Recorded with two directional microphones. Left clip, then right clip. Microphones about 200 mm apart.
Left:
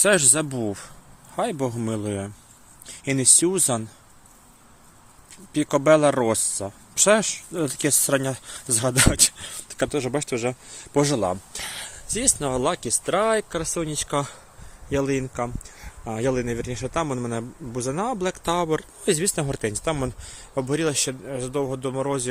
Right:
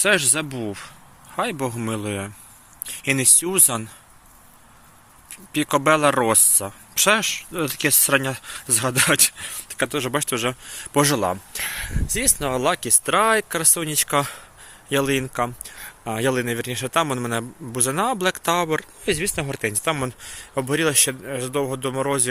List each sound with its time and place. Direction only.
0.0 s speech: 25° left (ahead or behind)
1.4 s speech: 15° left (ahead or behind)
5.3 s speech: 10° left (ahead or behind)
19.0 s speech: 25° left (ahead or behind); by 22.3 s 5° right (ahead or behind)